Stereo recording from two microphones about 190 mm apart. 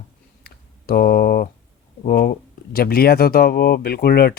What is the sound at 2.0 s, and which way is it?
Speech, 50° left (ahead or behind).